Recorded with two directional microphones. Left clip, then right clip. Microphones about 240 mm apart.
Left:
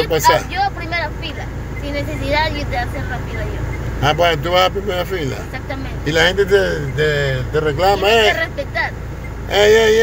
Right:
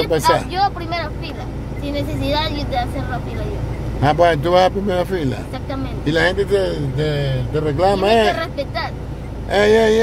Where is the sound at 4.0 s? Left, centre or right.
Centre.